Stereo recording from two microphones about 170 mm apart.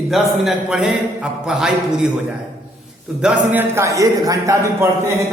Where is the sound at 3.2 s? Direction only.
10° right (ahead or behind).